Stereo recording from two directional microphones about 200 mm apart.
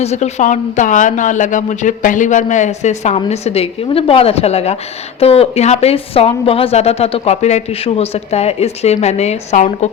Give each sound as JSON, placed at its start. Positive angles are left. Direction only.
{"t": 0.0, "sound": "a woman's voice", "side_deg": 35}